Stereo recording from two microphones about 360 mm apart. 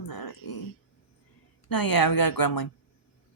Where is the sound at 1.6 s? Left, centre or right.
Left.